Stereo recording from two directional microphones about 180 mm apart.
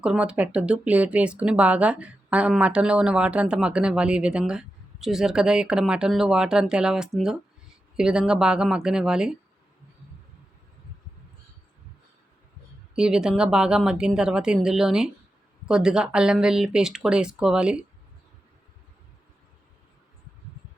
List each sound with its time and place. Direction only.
0.0 s speech: 5° right (ahead or behind)
13.0 s speech: 5° right (ahead or behind)